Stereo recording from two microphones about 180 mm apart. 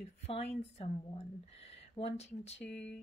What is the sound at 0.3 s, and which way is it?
Speech, 35° left (ahead or behind).